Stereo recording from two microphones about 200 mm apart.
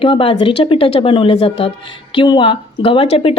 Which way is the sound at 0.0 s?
25° left (ahead or behind).